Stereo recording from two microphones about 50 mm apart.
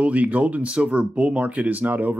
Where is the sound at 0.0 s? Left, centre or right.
Right.